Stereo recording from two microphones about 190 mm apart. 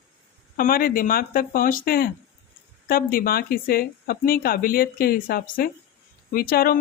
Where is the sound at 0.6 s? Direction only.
50° left (ahead or behind).